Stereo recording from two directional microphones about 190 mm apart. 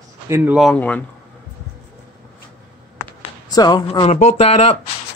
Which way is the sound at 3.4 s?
20° left (ahead or behind).